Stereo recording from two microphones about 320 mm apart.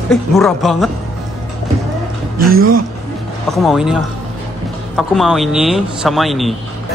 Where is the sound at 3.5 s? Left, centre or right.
Centre.